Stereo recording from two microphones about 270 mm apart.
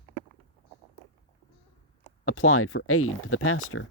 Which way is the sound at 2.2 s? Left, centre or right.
Left.